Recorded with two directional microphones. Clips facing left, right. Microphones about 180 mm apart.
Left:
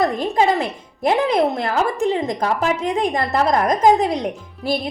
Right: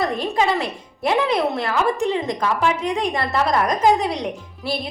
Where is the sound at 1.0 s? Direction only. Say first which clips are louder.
Left 2 dB; 45° left (ahead or behind).